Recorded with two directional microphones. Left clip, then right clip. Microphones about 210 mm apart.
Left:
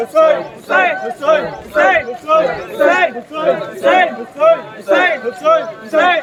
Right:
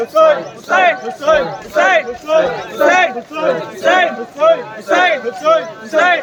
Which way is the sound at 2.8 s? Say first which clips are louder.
Right 2 dB; 30° right (ahead or behind).